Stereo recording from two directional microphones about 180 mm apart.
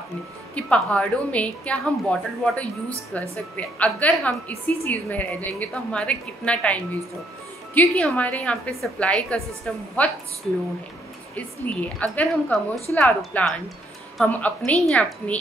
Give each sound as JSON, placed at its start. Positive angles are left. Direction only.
{"t": 0.6, "sound": "a woman's voice", "side_deg": 5}
{"t": 11.3, "sound": "a woman's voice", "side_deg": 10}